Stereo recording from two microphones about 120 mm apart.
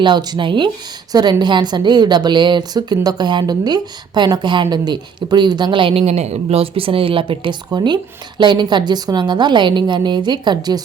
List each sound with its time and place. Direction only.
0.0 s a woman's voice: 35° right (ahead or behind)